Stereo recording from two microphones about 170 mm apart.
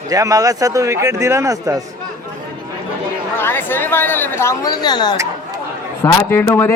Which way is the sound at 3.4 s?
10° left (ahead or behind).